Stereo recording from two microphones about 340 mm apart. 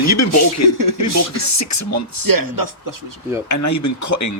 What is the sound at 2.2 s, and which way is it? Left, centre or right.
Speech, right.